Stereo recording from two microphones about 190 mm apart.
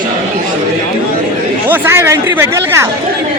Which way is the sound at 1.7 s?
10° right (ahead or behind).